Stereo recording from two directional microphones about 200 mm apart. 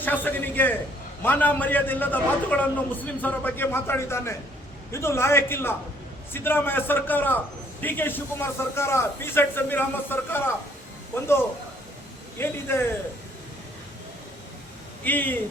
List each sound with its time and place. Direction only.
0.0 s a sound: 10° left (ahead or behind)
1.2 s a man's voice: 10° left (ahead or behind)
15.0 s a man's voice: 10° left (ahead or behind)